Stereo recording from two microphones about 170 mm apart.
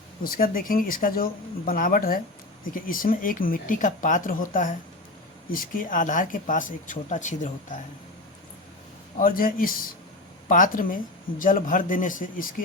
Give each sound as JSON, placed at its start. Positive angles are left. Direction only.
{"t": 0.3, "sound": "speech", "side_deg": 55}
{"t": 9.1, "sound": "speech", "side_deg": 55}